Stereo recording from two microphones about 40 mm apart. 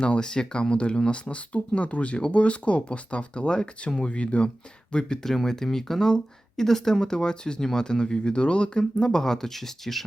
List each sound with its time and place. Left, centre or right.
0.0 s speech: left
5.2 s speech: centre